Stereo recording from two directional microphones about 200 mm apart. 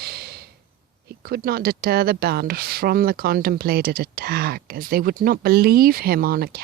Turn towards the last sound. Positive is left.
turn(degrees=-50)  # may be behind; listen again after turning